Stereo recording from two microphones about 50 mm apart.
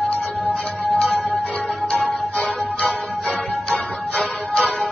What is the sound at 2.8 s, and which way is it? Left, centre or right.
Music, left.